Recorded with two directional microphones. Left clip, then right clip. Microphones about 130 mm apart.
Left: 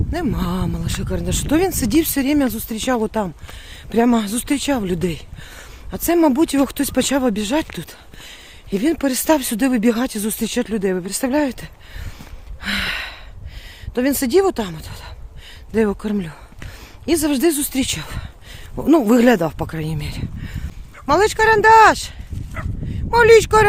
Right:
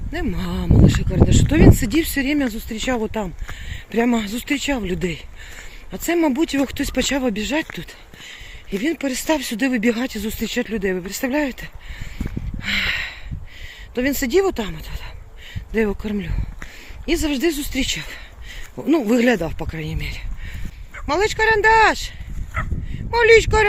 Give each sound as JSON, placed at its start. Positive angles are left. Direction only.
{"t": 0.1, "sound": "speech", "side_deg": 45}
{"t": 3.0, "sound": "speech", "side_deg": 25}
{"t": 8.8, "sound": "speech", "side_deg": 55}
{"t": 9.6, "sound": "speech", "side_deg": 35}
{"t": 12.7, "sound": "a sound", "side_deg": 35}
{"t": 13.9, "sound": "speech", "side_deg": 35}
{"t": 17.2, "sound": "speech", "side_deg": 45}
{"t": 21.1, "sound": "speech", "side_deg": 40}
{"t": 22.5, "sound": "speech", "side_deg": -15}
{"t": 23.1, "sound": "speech", "side_deg": 40}